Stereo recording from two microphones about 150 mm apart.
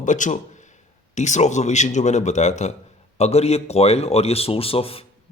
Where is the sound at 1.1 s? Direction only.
50° left (ahead or behind).